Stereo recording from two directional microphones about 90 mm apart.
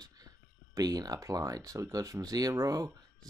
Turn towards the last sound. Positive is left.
turn(degrees=-45)  # may be behind; listen again after turning